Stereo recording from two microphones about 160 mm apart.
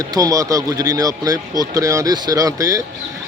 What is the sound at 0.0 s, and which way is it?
Speech, 20° right (ahead or behind).